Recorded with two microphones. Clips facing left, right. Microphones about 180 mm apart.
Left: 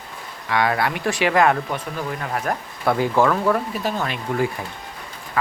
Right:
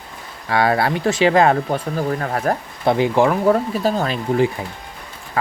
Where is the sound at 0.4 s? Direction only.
30° right (ahead or behind).